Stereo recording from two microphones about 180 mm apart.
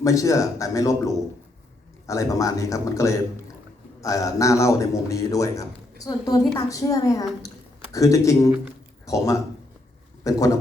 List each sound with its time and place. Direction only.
0.0 s a man's voice: 20° left (ahead or behind)